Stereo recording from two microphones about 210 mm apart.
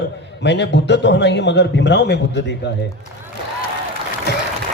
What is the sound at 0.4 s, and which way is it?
A man's voice, 55° left (ahead or behind).